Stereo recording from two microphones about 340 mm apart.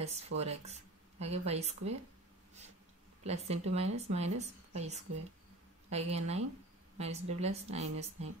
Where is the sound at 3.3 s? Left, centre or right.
Centre.